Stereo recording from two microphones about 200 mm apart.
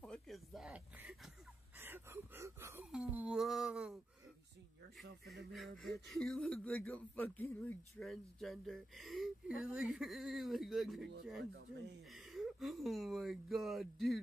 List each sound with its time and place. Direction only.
0.0 s a sound: centre (ahead or behind)
5.2 s speech: 60° right (ahead or behind)
5.5 s speech: centre (ahead or behind)
12.1 s speech: centre (ahead or behind)